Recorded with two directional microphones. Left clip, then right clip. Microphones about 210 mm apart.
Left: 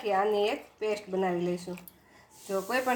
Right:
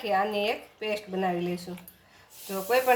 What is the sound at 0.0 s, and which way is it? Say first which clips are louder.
Speech: even; 15° left (ahead or behind).